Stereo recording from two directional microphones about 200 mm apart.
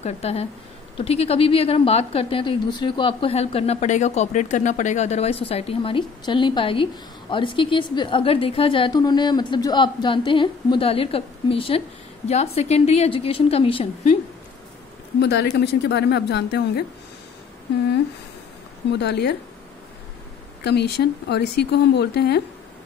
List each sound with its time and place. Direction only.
0.0 s a woman's voice: 30° left (ahead or behind)
15.1 s speech: 55° left (ahead or behind)
18.9 s speech: 60° left (ahead or behind)
20.6 s speech: 55° left (ahead or behind)